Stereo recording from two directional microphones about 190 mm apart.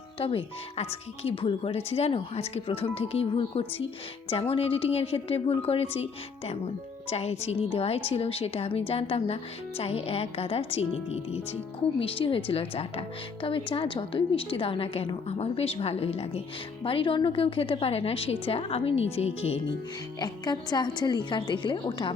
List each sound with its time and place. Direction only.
0.2 s a woman's voice: 30° left (ahead or behind)
20.1 s a woman's voice: 20° left (ahead or behind)